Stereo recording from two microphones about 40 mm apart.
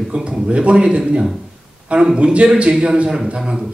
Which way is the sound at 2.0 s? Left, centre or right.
Right.